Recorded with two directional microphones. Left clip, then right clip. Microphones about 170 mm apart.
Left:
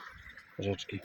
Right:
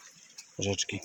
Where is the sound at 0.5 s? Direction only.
25° right (ahead or behind).